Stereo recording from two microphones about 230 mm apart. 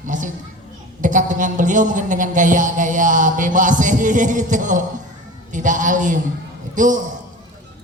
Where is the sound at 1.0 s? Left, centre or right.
Right.